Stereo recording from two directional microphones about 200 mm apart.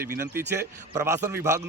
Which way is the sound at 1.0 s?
15° right (ahead or behind).